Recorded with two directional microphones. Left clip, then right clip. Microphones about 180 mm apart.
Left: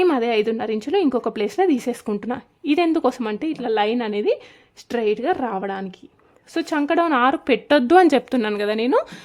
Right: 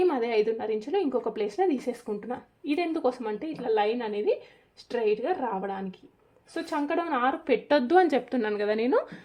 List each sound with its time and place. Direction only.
0.0 s speech: 45° left (ahead or behind)